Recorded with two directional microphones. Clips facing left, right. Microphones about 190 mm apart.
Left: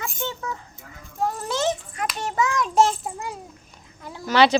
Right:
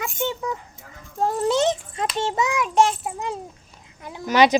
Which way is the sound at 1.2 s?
20° right (ahead or behind).